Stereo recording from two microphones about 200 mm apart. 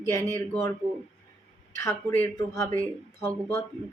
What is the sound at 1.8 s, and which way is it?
Speech, 15° left (ahead or behind).